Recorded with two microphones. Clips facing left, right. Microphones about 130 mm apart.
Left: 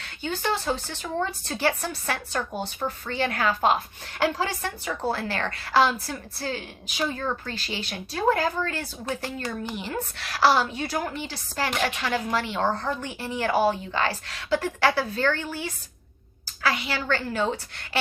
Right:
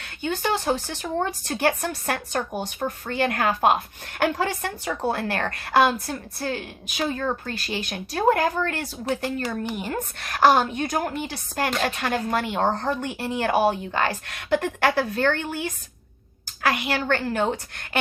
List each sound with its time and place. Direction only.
0.2 s a woman's voice: 55° right (ahead or behind)
16.6 s a woman's voice: 55° right (ahead or behind)